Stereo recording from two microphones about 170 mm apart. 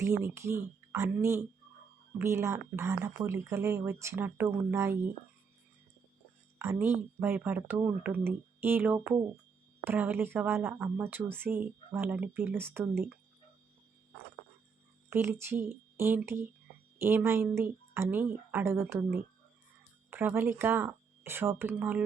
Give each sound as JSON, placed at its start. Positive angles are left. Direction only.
{"t": 0.0, "sound": "speech", "side_deg": -15}
{"t": 6.6, "sound": "speech", "side_deg": -15}
{"t": 15.1, "sound": "speech", "side_deg": -15}
{"t": 20.1, "sound": "speech", "side_deg": -10}